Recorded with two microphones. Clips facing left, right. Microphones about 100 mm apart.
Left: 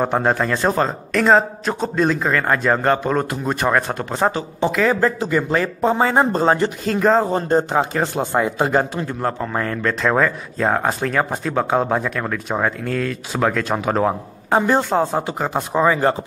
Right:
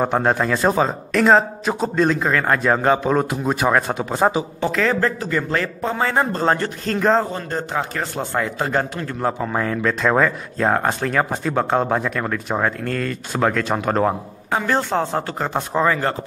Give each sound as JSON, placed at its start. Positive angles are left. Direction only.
{"t": 0.0, "sound": "speech", "side_deg": 0}
{"t": 4.7, "sound": "a man's voice", "side_deg": 10}
{"t": 6.8, "sound": "speech", "side_deg": 5}
{"t": 7.3, "sound": "a man's voice", "side_deg": 25}
{"t": 9.2, "sound": "speech", "side_deg": -5}
{"t": 14.6, "sound": "a man's voice", "side_deg": 10}